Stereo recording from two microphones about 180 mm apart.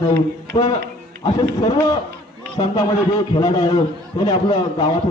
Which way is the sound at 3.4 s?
20° left (ahead or behind).